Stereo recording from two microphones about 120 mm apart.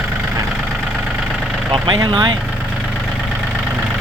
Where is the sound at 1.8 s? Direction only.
40° right (ahead or behind).